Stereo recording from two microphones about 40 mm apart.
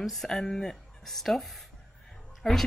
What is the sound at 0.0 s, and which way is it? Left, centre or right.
Speech, centre.